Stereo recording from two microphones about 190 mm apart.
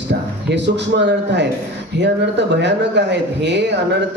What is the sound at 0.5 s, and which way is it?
Speech, 65° right (ahead or behind).